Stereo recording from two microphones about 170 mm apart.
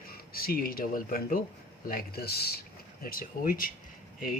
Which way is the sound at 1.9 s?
65° left (ahead or behind).